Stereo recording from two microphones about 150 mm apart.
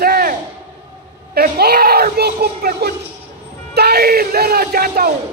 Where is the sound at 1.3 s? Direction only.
90° right.